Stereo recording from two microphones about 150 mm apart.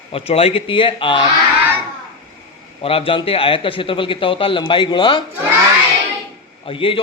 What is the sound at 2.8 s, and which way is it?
A man's voice, 40° left (ahead or behind).